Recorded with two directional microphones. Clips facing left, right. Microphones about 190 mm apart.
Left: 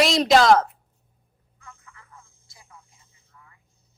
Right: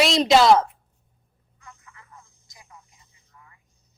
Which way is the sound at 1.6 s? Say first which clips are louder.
Even; 20° right (ahead or behind).